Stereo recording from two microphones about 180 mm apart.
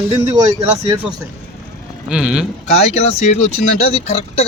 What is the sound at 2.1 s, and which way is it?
Speech, 5° right (ahead or behind).